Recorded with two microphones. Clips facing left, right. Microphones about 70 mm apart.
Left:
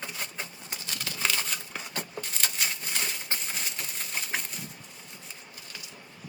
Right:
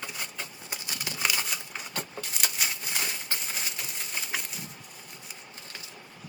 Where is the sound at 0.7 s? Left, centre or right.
Right.